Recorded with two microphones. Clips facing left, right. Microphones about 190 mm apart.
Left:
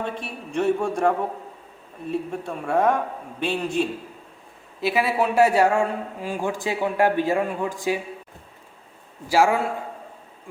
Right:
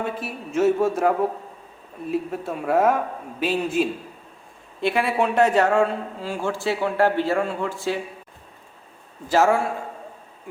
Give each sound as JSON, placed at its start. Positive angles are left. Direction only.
{"t": 0.0, "sound": "a man's voice", "side_deg": -5}
{"t": 9.3, "sound": "a man's voice", "side_deg": 10}